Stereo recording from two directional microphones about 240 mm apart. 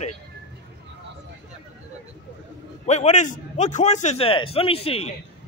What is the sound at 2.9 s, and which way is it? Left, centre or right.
Speech, left.